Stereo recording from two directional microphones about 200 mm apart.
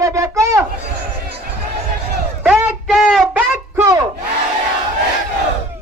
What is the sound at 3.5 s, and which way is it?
Music, 15° right (ahead or behind).